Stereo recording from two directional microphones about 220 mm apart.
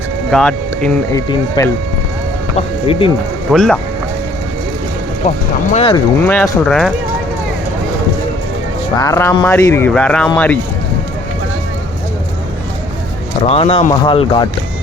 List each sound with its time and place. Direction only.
0.3 s speech: 5° left (ahead or behind)
1.1 s speech: 15° left (ahead or behind)
3.5 s speech: centre (ahead or behind)
5.2 s speech: 35° left (ahead or behind)
6.2 s speech: 10° left (ahead or behind)
9.0 s speech: 15° left (ahead or behind)
13.5 s speech: 25° left (ahead or behind)